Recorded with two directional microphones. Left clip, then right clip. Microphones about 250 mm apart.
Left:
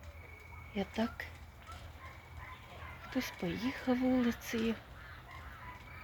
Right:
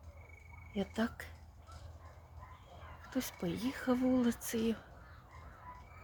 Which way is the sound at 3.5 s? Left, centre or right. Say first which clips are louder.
Left 1 dB; right.